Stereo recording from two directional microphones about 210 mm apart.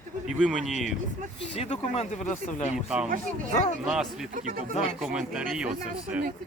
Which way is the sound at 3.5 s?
35° left (ahead or behind).